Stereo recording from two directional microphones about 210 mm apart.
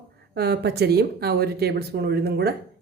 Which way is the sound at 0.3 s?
50° right (ahead or behind).